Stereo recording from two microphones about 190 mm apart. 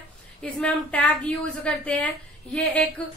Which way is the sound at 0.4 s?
5° left (ahead or behind).